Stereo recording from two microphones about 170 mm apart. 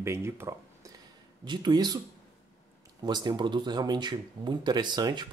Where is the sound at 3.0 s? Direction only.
25° right (ahead or behind).